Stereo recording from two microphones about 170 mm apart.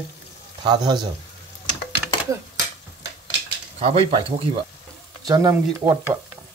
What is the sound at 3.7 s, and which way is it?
Speech, 35° right (ahead or behind).